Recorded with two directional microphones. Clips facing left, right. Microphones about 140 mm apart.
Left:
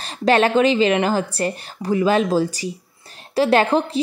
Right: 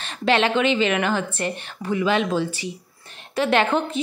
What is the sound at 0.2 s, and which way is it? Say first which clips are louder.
A woman's voice: left 4 dB; 40° left (ahead or behind).